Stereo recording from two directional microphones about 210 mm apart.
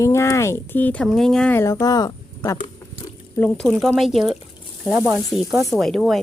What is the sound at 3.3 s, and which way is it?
Speech, 5° left (ahead or behind).